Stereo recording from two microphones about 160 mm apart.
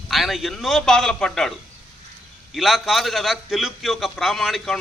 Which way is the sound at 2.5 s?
Centre (ahead or behind).